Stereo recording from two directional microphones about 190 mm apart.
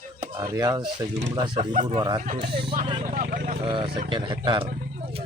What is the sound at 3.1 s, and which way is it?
Vehicle, 50° right (ahead or behind).